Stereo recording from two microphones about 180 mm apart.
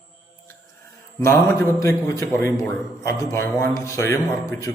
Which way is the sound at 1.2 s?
15° left (ahead or behind).